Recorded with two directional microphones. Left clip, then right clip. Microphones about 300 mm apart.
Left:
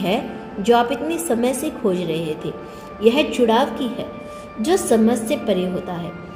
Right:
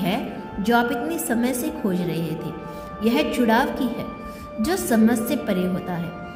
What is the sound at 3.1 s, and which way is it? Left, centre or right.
Speech, right.